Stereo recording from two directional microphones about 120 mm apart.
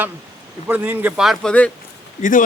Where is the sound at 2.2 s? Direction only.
90° left.